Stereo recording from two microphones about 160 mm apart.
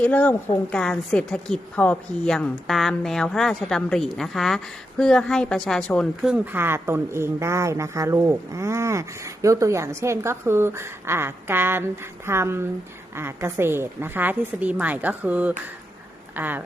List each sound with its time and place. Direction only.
0.0 s a woman's voice: 10° left (ahead or behind)
6.3 s speech: 10° right (ahead or behind)